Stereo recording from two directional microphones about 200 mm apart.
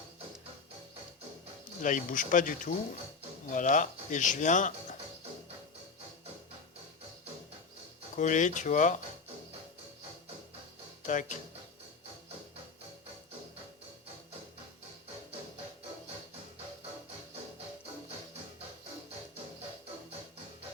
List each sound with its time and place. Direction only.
1.8 s speech: 40° left (ahead or behind)
8.1 s speech: 40° left (ahead or behind)
11.0 s speech: 40° left (ahead or behind)